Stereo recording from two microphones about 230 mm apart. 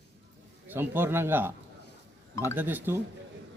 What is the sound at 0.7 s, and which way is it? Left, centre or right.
Speech, centre.